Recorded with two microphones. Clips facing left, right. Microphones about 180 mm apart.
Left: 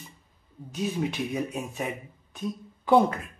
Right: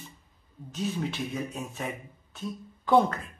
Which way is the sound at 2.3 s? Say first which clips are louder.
Left 4 dB; 15° left (ahead or behind).